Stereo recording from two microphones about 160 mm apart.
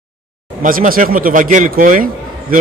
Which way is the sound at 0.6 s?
60° right (ahead or behind).